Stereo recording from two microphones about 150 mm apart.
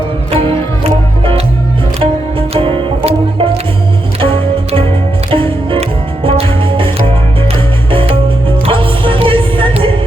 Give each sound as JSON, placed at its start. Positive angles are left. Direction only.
{"t": 0.3, "sound": "music", "side_deg": -40}
{"t": 2.5, "sound": "music", "side_deg": -40}